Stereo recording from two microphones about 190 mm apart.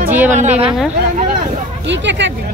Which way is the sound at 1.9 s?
70° right (ahead or behind).